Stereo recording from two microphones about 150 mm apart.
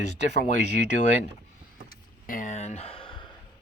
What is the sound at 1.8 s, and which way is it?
Vehicle, 60° left (ahead or behind).